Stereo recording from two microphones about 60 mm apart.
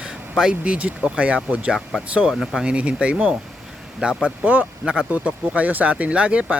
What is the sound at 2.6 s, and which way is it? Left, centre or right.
Speech, centre.